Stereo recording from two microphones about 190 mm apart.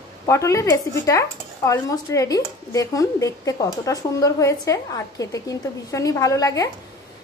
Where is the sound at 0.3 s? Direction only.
15° left (ahead or behind).